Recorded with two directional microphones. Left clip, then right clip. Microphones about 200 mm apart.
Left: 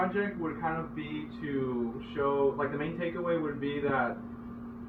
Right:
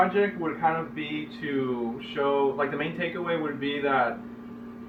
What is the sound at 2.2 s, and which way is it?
A man's voice, 35° right (ahead or behind).